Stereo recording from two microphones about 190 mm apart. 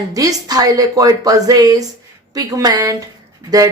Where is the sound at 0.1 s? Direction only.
20° right (ahead or behind).